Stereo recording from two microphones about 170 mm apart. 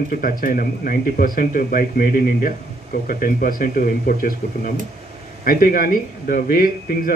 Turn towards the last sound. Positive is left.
turn(degrees=55)  # may be behind; listen again after turning